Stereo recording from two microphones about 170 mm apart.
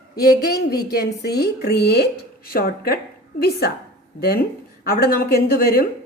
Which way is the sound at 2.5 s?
65° left (ahead or behind).